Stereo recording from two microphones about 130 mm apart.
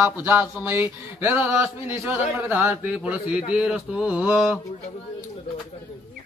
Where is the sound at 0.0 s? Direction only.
15° right (ahead or behind).